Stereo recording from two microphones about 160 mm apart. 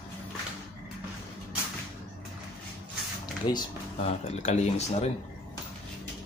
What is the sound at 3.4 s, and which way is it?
Speech, 30° left (ahead or behind).